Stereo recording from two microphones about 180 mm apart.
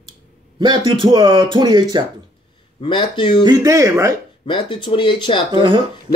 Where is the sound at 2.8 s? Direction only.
25° left (ahead or behind).